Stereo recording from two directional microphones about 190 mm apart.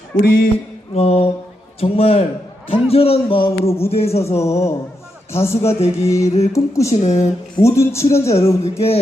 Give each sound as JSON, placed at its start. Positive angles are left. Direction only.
{"t": 0.9, "sound": "a man's voice", "side_deg": 30}
{"t": 4.4, "sound": "a man's voice", "side_deg": 15}
{"t": 6.2, "sound": "a man's voice", "side_deg": 35}
{"t": 6.5, "sound": "a man's voice", "side_deg": 15}
{"t": 7.0, "sound": "a man's voice", "side_deg": 35}
{"t": 7.5, "sound": "a man's voice", "side_deg": 15}